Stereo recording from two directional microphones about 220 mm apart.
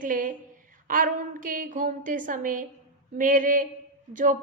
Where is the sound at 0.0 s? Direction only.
35° right (ahead or behind).